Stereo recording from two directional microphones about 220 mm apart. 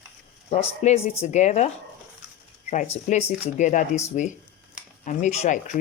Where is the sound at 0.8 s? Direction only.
30° left (ahead or behind).